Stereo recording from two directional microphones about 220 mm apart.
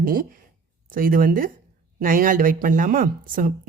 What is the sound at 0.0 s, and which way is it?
Speech, 40° right (ahead or behind).